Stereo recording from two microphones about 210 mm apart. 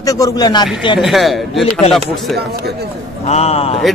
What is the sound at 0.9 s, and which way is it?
Speech, centre (ahead or behind).